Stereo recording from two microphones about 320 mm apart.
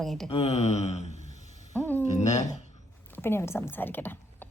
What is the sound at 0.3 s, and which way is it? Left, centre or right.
Speech, centre.